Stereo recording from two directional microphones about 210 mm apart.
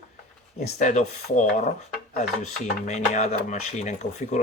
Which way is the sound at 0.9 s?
35° left (ahead or behind).